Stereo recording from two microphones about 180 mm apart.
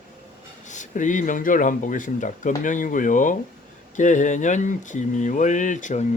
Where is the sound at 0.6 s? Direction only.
45° left (ahead or behind).